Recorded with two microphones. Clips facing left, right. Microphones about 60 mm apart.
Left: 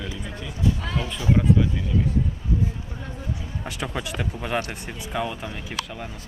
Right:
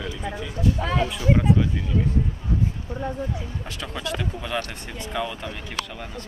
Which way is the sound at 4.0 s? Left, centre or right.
Centre.